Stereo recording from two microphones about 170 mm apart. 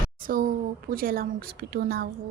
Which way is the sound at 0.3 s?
60° right (ahead or behind).